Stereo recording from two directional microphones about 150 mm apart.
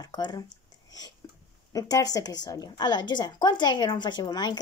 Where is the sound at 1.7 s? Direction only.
25° left (ahead or behind).